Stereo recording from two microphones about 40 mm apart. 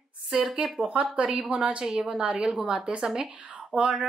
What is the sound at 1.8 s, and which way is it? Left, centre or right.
A woman's voice, centre.